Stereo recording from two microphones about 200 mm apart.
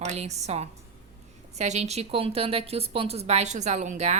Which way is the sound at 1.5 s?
35° right (ahead or behind).